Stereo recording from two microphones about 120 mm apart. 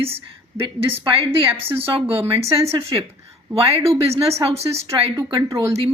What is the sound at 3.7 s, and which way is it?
Speech, 55° right (ahead or behind).